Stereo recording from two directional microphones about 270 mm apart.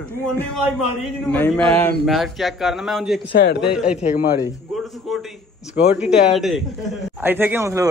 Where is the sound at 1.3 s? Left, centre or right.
Centre.